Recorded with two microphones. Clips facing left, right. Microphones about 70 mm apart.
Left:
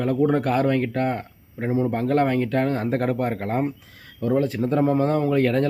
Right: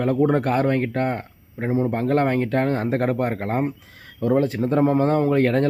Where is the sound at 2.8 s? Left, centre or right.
Right.